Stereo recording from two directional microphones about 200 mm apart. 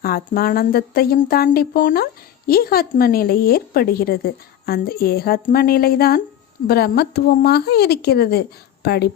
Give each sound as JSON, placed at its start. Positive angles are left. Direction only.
{"t": 0.0, "sound": "a woman's voice", "side_deg": 50}